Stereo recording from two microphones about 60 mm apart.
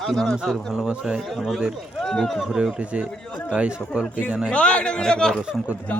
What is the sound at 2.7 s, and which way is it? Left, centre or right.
Speech, centre.